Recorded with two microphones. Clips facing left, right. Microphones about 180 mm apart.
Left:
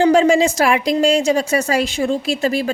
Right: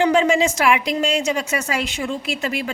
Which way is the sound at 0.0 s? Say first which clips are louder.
Left 4 dB; 35° left (ahead or behind).